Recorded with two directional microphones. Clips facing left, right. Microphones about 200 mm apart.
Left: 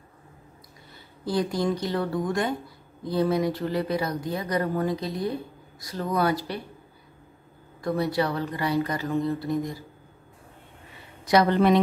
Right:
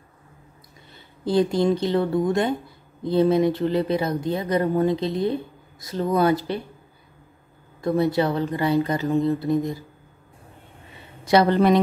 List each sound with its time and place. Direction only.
0.9 s speech: 25° right (ahead or behind)
7.8 s speech: 25° right (ahead or behind)
11.2 s speech: 30° right (ahead or behind)